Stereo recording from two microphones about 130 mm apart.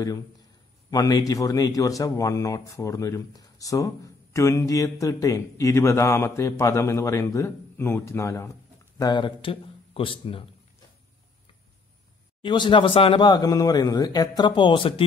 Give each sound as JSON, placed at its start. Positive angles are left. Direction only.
{"t": 0.8, "sound": "speech", "side_deg": 30}
{"t": 12.4, "sound": "speech", "side_deg": 40}